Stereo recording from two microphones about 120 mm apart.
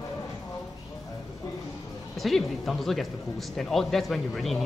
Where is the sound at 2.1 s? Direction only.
Centre (ahead or behind).